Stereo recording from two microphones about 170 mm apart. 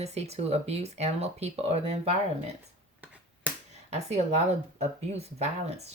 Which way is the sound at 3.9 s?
40° right (ahead or behind).